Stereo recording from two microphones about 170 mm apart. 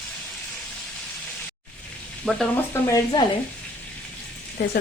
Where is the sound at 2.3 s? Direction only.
5° left (ahead or behind).